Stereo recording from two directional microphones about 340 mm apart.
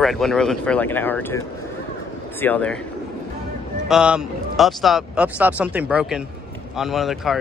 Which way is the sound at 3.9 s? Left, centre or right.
Centre.